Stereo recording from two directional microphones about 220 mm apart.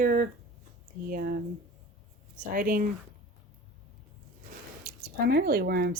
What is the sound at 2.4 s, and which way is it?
Speech, 40° right (ahead or behind).